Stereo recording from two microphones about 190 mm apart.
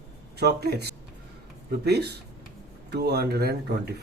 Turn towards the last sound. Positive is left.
turn(degrees=-55)  # may be behind; listen again after turning